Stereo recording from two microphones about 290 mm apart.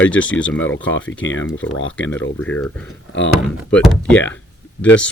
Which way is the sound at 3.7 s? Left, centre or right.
Centre.